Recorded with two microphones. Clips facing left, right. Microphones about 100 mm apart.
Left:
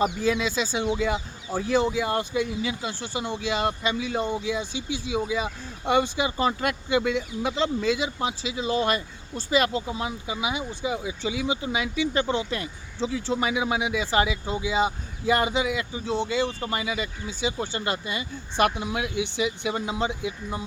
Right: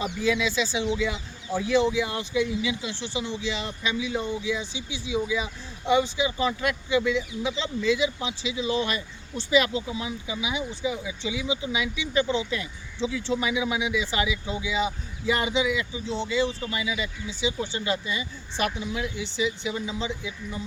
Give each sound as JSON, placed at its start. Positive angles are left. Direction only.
{"t": 0.0, "sound": "speech", "side_deg": 45}